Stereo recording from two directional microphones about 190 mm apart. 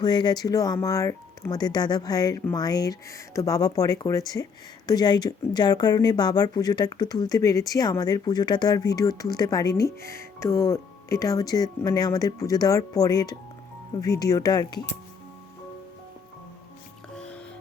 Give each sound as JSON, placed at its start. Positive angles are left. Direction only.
{"t": 0.0, "sound": "speech", "side_deg": 20}